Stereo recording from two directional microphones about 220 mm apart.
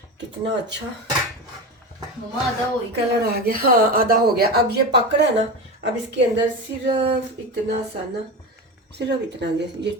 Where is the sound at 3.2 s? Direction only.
45° right (ahead or behind).